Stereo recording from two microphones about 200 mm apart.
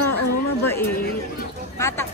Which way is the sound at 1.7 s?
15° left (ahead or behind).